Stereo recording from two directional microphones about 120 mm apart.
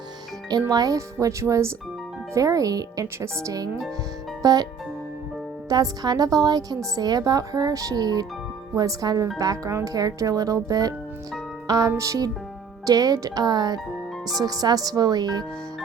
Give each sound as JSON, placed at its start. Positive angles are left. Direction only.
{"t": 0.7, "sound": "a woman's voice", "side_deg": -30}
{"t": 5.6, "sound": "a woman's voice", "side_deg": -30}